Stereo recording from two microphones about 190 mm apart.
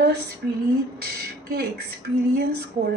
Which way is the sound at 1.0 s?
55° right (ahead or behind).